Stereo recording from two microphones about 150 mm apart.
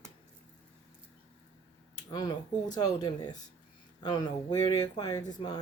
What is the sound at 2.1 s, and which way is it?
Speech, 25° left (ahead or behind).